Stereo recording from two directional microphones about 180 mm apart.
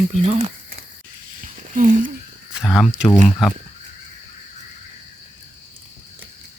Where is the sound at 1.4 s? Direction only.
50° right (ahead or behind).